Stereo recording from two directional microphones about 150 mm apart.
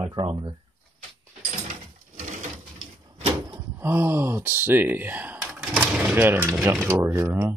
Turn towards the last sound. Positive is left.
turn(degrees=-15)  # may be behind; listen again after turning